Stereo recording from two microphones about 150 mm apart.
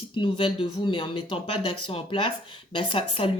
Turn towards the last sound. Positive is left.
turn(degrees=35)  # may be behind; listen again after turning